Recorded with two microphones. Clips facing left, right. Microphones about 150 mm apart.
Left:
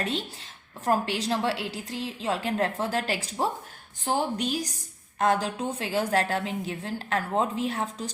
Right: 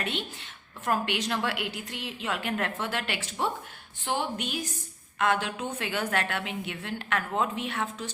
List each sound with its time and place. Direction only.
0.0 s a woman's voice: 35° left (ahead or behind)